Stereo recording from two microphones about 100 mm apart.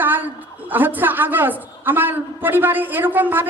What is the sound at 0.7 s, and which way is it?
A man's voice, 20° right (ahead or behind).